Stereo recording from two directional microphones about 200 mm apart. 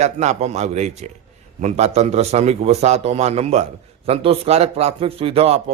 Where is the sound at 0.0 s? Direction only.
35° right (ahead or behind).